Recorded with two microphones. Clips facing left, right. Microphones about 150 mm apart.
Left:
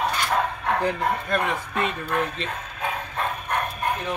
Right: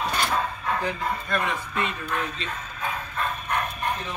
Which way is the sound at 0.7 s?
60° left (ahead or behind).